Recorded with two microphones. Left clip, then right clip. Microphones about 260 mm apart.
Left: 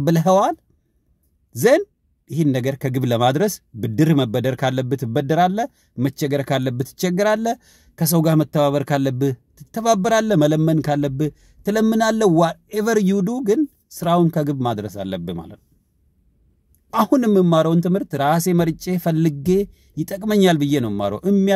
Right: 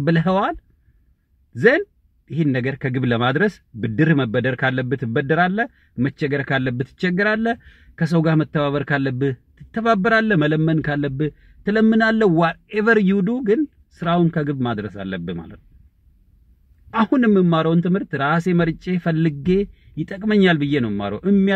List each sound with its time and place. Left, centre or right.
0.1 s speech: left
2.2 s speech: left
16.9 s speech: left